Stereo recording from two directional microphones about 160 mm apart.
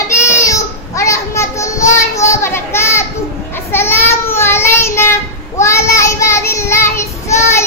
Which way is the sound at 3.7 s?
15° left (ahead or behind).